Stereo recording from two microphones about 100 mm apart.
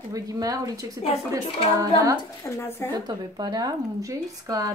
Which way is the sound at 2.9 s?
45° right (ahead or behind).